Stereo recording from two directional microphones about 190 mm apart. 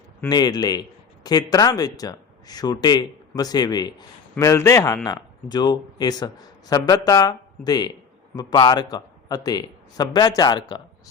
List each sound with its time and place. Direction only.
0.3 s a man's voice: 20° left (ahead or behind)